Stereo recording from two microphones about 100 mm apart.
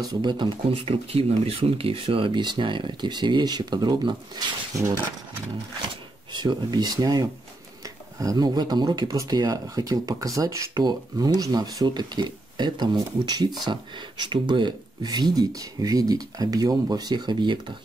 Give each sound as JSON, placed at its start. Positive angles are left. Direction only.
{"t": 0.0, "sound": "speech", "side_deg": -40}
{"t": 0.7, "sound": "speech", "side_deg": -70}
{"t": 6.3, "sound": "speech", "side_deg": -45}